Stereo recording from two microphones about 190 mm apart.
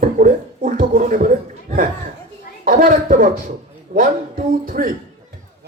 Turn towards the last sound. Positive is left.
turn(degrees=-50)  # may be behind; listen again after turning